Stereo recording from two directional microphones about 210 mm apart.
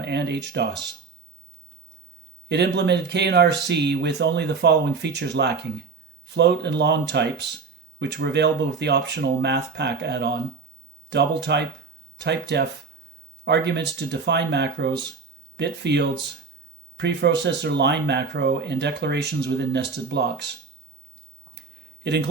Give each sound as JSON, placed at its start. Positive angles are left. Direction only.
{"t": 0.0, "sound": "speech", "side_deg": -55}
{"t": 2.5, "sound": "speech", "side_deg": -55}